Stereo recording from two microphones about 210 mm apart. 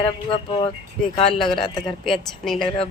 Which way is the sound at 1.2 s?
Centre (ahead or behind).